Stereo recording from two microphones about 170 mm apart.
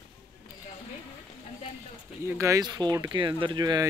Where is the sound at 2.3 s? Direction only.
15° right (ahead or behind).